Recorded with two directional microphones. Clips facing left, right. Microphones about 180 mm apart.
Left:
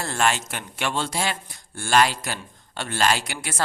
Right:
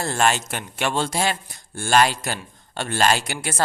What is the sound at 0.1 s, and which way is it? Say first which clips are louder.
A man's voice: right 2 dB; 40° right (ahead or behind).